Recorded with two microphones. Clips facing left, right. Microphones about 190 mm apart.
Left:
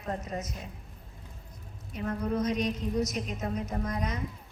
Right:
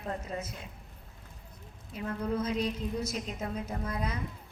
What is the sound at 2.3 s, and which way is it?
A woman's voice, 30° right (ahead or behind).